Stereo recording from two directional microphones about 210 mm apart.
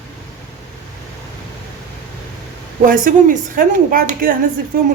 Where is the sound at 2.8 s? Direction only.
40° right (ahead or behind).